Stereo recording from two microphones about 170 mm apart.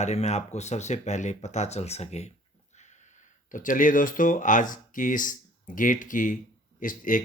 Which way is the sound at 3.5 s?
50° left (ahead or behind).